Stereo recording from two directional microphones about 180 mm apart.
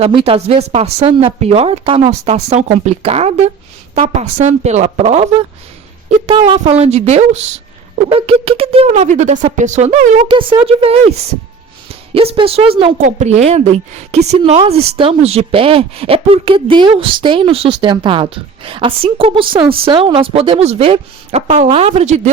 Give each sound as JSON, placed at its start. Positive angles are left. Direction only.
{"t": 0.3, "sound": "speech", "side_deg": -35}
{"t": 10.2, "sound": "a woman's voice", "side_deg": -30}